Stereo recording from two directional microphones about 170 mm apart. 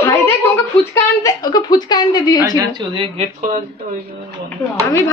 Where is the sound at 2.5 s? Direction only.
30° right (ahead or behind).